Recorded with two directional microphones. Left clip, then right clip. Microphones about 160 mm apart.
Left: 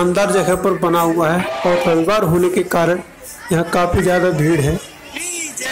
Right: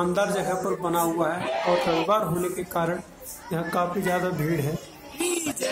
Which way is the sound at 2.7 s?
30° left (ahead or behind).